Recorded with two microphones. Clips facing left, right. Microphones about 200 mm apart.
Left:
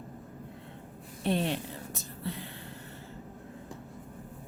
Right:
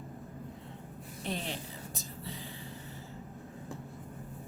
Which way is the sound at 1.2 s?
60° left (ahead or behind).